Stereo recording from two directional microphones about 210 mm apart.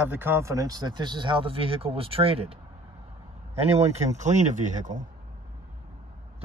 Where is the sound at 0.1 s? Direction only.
10° right (ahead or behind); by 2.5 s 25° right (ahead or behind).